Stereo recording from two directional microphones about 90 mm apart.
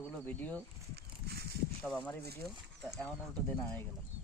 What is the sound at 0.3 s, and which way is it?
Speech, 20° left (ahead or behind).